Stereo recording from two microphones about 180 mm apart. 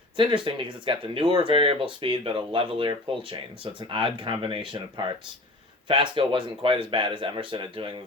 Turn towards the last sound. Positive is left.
turn(degrees=-30)  # may be behind; listen again after turning